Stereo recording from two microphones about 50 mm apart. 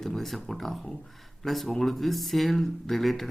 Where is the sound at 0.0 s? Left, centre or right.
Centre.